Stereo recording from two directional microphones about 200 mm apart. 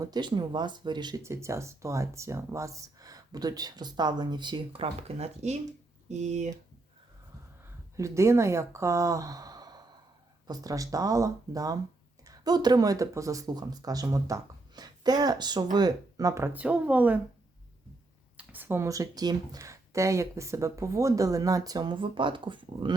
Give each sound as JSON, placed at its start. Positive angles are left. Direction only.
{"t": 0.0, "sound": "speech", "side_deg": -20}
{"t": 7.9, "sound": "speech", "side_deg": -15}
{"t": 18.3, "sound": "speech", "side_deg": -10}